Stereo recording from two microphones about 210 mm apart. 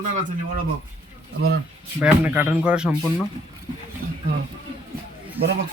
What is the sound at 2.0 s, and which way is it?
Speech, 5° right (ahead or behind).